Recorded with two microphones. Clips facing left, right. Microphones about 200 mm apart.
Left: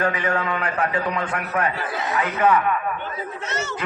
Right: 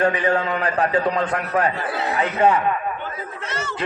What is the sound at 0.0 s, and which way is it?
A man's voice, 30° right (ahead or behind).